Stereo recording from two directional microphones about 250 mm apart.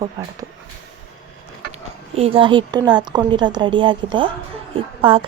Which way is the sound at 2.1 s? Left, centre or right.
Right.